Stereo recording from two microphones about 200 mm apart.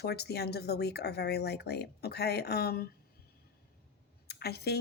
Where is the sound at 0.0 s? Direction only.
55° left (ahead or behind).